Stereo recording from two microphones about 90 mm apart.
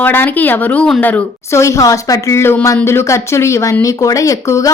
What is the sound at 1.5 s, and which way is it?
A woman's voice, 30° left (ahead or behind).